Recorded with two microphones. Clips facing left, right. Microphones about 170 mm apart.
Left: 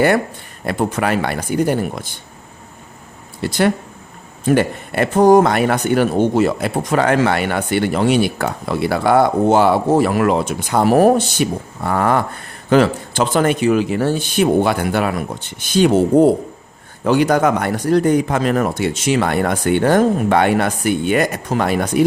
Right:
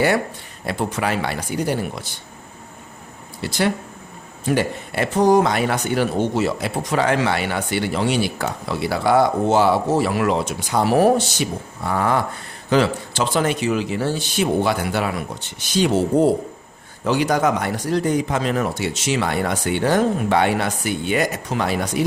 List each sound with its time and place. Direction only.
0.6 s speech: 55° left (ahead or behind)
3.4 s speech: 55° left (ahead or behind)